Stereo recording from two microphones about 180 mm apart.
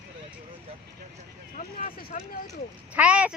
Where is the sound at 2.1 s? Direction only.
45° left (ahead or behind).